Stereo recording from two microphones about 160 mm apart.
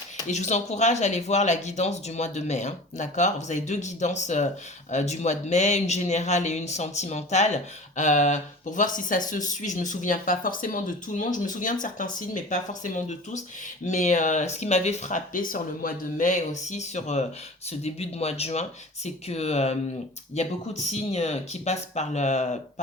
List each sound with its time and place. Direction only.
0.3 s speech: 45° left (ahead or behind)